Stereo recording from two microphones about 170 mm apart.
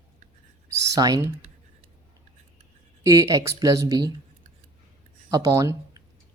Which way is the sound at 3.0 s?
20° right (ahead or behind).